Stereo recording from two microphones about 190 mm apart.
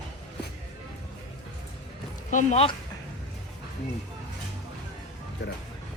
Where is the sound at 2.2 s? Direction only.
40° left (ahead or behind).